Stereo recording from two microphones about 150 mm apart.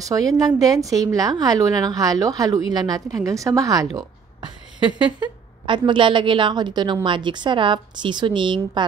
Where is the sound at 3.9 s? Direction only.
30° right (ahead or behind).